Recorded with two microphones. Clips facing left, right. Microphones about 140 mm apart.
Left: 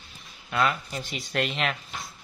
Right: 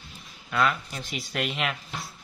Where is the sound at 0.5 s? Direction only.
Centre (ahead or behind).